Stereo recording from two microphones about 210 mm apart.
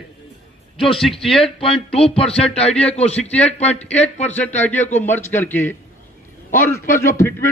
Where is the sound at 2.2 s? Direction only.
5° left (ahead or behind).